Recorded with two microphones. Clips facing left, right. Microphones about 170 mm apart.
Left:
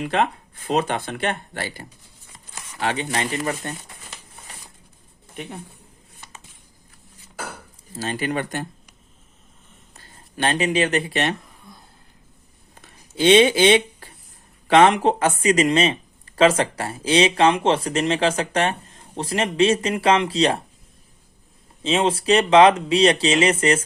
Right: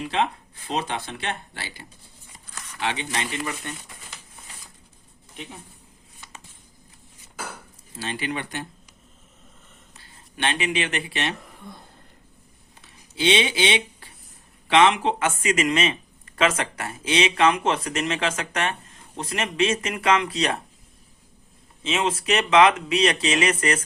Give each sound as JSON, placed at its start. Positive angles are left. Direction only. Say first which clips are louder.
{"t": 0.0, "sound": "speech", "louder": "left 3 dB", "side_deg": 50}
{"t": 7.9, "sound": "speech", "louder": "left 5 dB", "side_deg": 45}
{"t": 9.9, "sound": "speech", "louder": "left 5 dB", "side_deg": 40}
{"t": 12.8, "sound": "a sound", "louder": "left 5 dB", "side_deg": 45}
{"t": 14.7, "sound": "speech", "louder": "left 4 dB", "side_deg": 45}
{"t": 21.8, "sound": "speech", "louder": "left 5 dB", "side_deg": 30}